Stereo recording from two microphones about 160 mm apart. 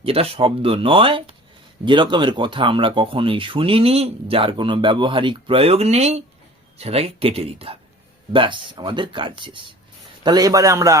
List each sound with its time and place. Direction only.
0.0 s a man's voice: 35° right (ahead or behind); by 10.9 s 20° right (ahead or behind)